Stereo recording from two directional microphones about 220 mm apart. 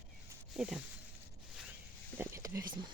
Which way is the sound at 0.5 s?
Centre (ahead or behind).